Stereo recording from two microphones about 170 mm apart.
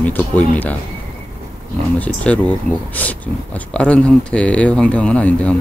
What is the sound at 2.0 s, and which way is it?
Speech, 10° left (ahead or behind).